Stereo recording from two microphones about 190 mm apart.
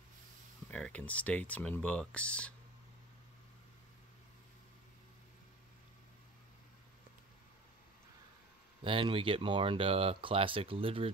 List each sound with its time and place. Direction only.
0.7 s speech: 5° left (ahead or behind)
8.8 s speech: 25° right (ahead or behind)